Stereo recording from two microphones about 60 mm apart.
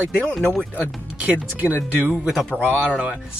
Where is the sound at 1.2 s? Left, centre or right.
Right.